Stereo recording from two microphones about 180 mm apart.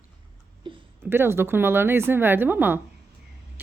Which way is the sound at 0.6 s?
25° right (ahead or behind).